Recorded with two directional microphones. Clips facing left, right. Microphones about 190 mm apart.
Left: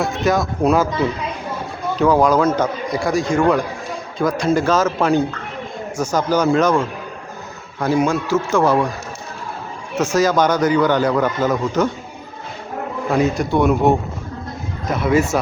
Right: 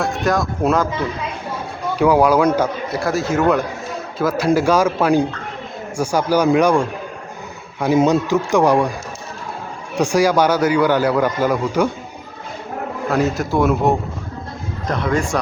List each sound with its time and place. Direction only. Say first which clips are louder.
0.2 s speech: left 3 dB; centre (ahead or behind)
2.0 s a man's voice: right 1 dB; 10° right (ahead or behind)
9.9 s a man's voice: right 1 dB; 15° right (ahead or behind)
13.1 s speech: left 1 dB; centre (ahead or behind)